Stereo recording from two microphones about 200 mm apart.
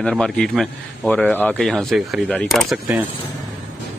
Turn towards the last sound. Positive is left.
turn(degrees=-5)  # may be behind; listen again after turning